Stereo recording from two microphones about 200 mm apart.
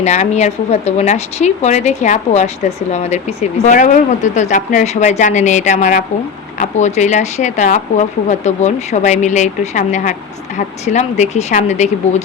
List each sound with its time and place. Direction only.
0.0 s speech: 35° left (ahead or behind)